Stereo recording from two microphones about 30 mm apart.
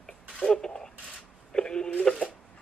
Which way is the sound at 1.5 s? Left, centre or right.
Left.